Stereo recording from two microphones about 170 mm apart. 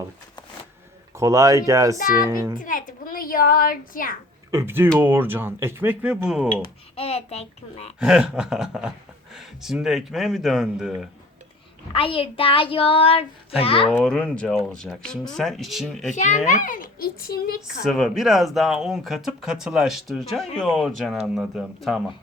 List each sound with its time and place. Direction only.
1.1 s speech: 20° right (ahead or behind)
2.6 s speech: 55° left (ahead or behind)
4.5 s speech: 15° right (ahead or behind)
6.6 s a child's voice: 35° left (ahead or behind)
7.9 s speech: 5° right (ahead or behind)
11.9 s a child's voice: 30° left (ahead or behind)
13.8 s speech: 5° left (ahead or behind)
16.1 s a child's voice: 45° left (ahead or behind); by 17.6 s 65° left (ahead or behind)
17.8 s speech: centre (ahead or behind)